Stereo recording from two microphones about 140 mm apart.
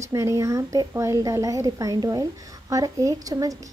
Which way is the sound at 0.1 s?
20° right (ahead or behind).